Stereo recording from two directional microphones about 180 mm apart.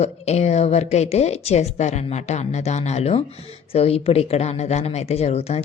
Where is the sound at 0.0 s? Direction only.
35° left (ahead or behind).